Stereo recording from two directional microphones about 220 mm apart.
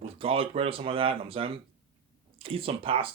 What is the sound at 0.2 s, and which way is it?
Speech, 25° right (ahead or behind).